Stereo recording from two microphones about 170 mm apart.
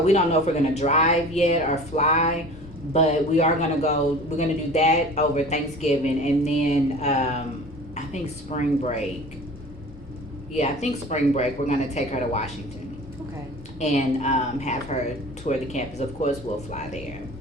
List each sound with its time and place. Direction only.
0.0 s a woman's voice: 40° left (ahead or behind)
10.6 s speech: 40° left (ahead or behind)
13.7 s speech: 40° left (ahead or behind)